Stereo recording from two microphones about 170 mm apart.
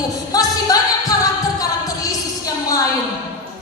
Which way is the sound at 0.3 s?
20° left (ahead or behind).